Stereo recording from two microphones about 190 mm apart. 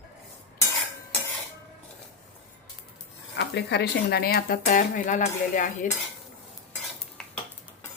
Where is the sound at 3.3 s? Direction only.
60° left (ahead or behind); by 5.9 s 45° left (ahead or behind).